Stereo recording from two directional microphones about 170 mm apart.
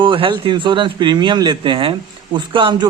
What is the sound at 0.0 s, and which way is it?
A man's voice, 30° right (ahead or behind).